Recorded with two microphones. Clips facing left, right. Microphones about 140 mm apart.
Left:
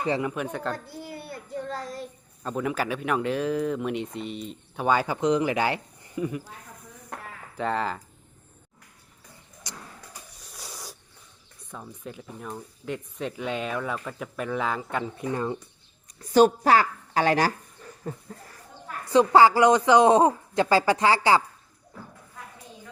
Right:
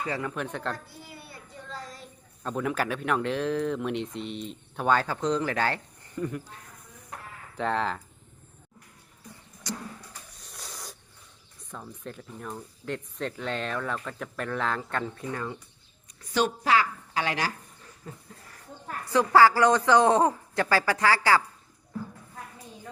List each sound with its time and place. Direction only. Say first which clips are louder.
0.0 s speech: left 5 dB; 20° left (ahead or behind)
0.3 s speech: left 3 dB; 5° left (ahead or behind)
1.1 s child singing: left 12 dB; 65° left (ahead or behind)
2.4 s speech: left 1 dB; centre (ahead or behind)
7.5 s speech: even; centre (ahead or behind)
9.7 s speech: right 8 dB; 15° left (ahead or behind)
10.5 s a sound: left 1 dB; 5° left (ahead or behind)
11.7 s speech: left 1 dB; 5° left (ahead or behind)
15.3 s speech: left 5 dB; 20° left (ahead or behind)
16.3 s a woman's voice: left 6 dB; 40° left (ahead or behind)
19.1 s speech: left 2 dB; 20° left (ahead or behind)